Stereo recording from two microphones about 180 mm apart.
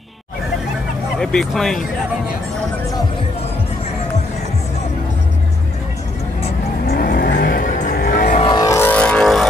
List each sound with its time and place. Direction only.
1.2 s speech: centre (ahead or behind)
6.9 s vehicle: 55° left (ahead or behind)
8.4 s vehicle: 25° left (ahead or behind); by 9.5 s centre (ahead or behind)